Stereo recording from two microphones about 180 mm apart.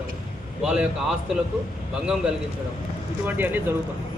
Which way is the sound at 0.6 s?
5° right (ahead or behind).